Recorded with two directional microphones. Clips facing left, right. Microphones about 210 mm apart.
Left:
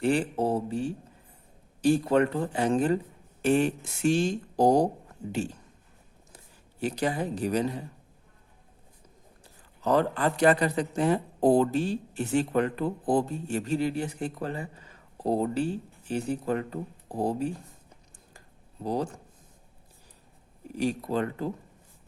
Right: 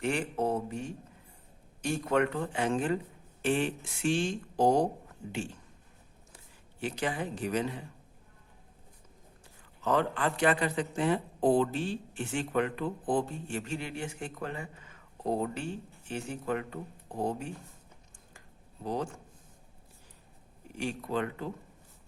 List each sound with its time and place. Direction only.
0.0 s a man's voice: 35° left (ahead or behind)
9.8 s a man's voice: 40° left (ahead or behind)
18.3 s a sound: 35° left (ahead or behind)
20.7 s a man's voice: 35° left (ahead or behind)